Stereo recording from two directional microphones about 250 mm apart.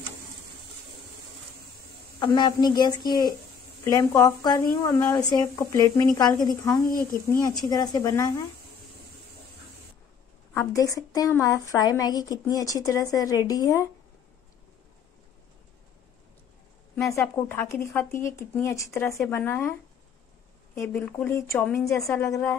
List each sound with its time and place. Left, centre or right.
2.1 s speech: centre
10.5 s speech: centre
16.9 s speech: centre
20.7 s speech: centre